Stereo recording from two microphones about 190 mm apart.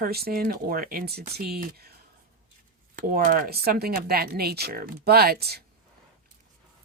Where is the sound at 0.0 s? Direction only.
55° right (ahead or behind).